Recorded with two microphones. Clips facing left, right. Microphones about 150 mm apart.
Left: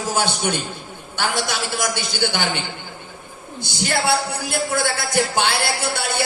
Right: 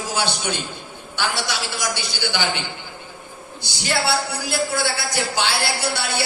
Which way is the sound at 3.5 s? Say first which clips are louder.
Left 1 dB; 50° left (ahead or behind).